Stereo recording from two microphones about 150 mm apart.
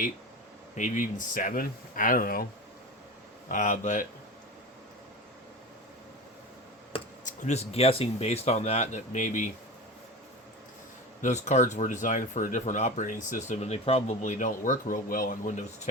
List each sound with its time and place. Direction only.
0.8 s speech: 60° left (ahead or behind)
3.5 s speech: 55° left (ahead or behind)
7.3 s speech: 50° left (ahead or behind)
11.2 s speech: 50° left (ahead or behind); by 15.5 s 65° left (ahead or behind)